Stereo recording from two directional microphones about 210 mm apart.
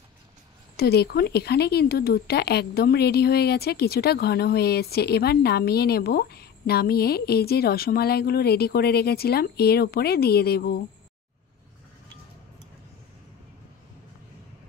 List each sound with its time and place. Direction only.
0.7 s speech: 50° left (ahead or behind)